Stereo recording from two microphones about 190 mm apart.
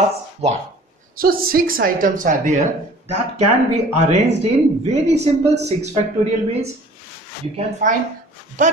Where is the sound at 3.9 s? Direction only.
35° right (ahead or behind).